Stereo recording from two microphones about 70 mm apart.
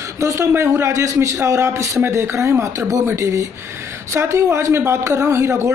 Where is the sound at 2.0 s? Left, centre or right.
Right.